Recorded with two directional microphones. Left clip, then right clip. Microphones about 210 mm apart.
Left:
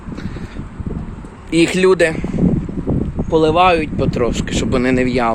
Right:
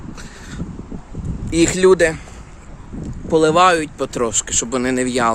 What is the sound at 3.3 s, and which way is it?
Speech, 30° right (ahead or behind).